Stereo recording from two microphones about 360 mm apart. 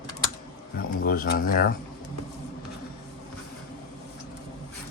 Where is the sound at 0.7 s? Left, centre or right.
Left.